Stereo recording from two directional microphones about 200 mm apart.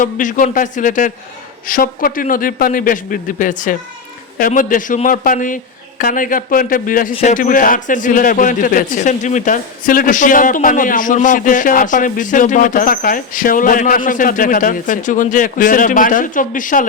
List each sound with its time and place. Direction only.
0.0 s a man's voice: 40° left (ahead or behind)